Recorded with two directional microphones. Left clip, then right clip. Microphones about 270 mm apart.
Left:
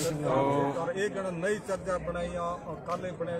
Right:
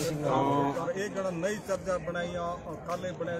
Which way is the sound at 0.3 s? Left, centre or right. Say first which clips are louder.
Even; centre.